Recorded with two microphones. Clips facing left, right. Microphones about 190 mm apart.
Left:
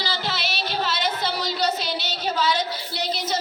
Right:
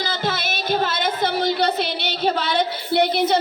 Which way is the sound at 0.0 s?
50° right (ahead or behind).